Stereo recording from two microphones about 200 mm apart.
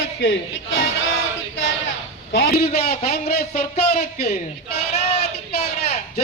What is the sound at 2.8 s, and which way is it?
Speech, 35° left (ahead or behind).